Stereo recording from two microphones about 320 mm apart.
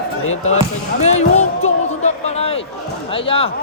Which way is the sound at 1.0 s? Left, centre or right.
Left.